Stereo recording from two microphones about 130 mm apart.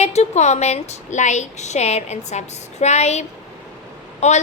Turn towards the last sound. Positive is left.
turn(degrees=65)  # may be behind; listen again after turning